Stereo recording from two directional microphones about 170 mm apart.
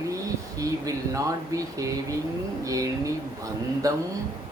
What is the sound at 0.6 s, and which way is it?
Speech, 20° right (ahead or behind).